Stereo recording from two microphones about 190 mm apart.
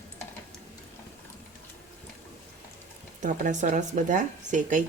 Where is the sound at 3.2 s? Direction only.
40° right (ahead or behind).